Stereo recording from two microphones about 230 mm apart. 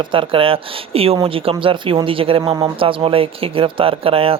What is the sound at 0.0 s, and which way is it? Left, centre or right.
Speech, right.